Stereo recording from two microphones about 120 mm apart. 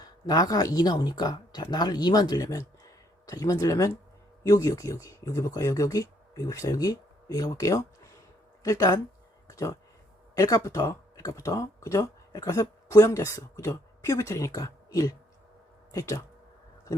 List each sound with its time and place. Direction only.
0.0 s speech: 30° left (ahead or behind)
9.5 s a sound: 25° left (ahead or behind)
10.3 s speech: 25° left (ahead or behind)